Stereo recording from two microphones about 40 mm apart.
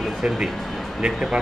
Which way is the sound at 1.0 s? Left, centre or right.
Right.